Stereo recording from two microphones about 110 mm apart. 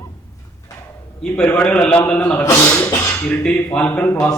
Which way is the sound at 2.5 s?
25° left (ahead or behind).